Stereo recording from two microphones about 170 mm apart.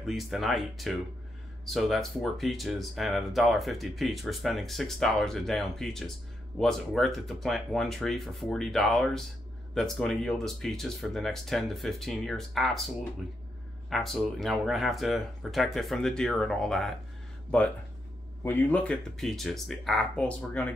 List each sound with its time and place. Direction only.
0.0 s speech: centre (ahead or behind)
18.4 s speech: 10° left (ahead or behind)